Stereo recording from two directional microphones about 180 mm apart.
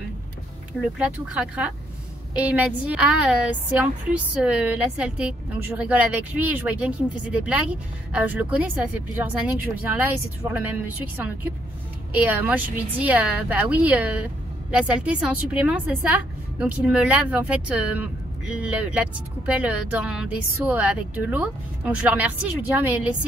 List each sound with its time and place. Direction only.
0.9 s a woman's voice: 5° right (ahead or behind)